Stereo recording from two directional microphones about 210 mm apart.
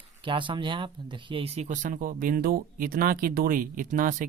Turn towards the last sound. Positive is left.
turn(degrees=-40)  # may be behind; listen again after turning